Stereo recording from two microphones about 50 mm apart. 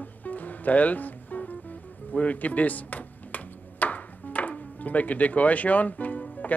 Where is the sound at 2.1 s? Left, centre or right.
Left.